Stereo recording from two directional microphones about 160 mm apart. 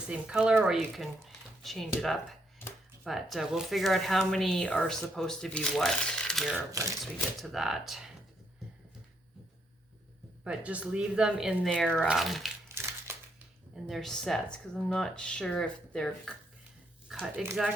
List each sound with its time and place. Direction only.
0.1 s speech: 5° right (ahead or behind)
3.0 s speech: centre (ahead or behind)
10.4 s speech: 5° right (ahead or behind)
12.6 s crumpling: 15° right (ahead or behind)
13.8 s speech: centre (ahead or behind)